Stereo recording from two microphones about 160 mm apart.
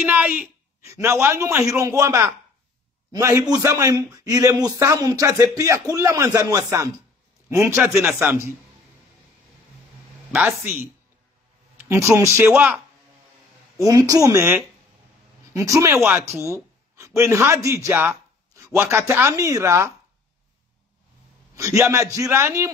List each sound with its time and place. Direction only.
0.0 s a man's voice: 10° right (ahead or behind)
7.7 s speech: 5° right (ahead or behind)
10.6 s speech: 15° right (ahead or behind)
13.7 s a man's voice: 20° right (ahead or behind)
21.5 s a man's voice: 20° right (ahead or behind)